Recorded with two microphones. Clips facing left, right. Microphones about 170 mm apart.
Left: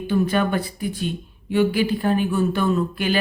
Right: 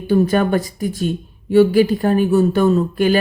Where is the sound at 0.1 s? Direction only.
40° right (ahead or behind).